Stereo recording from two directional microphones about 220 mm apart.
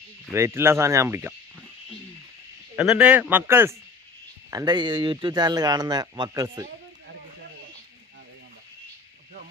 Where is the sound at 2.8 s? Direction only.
5° right (ahead or behind).